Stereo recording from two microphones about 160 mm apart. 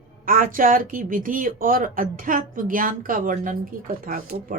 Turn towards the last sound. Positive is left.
turn(degrees=-70)  # may be behind; listen again after turning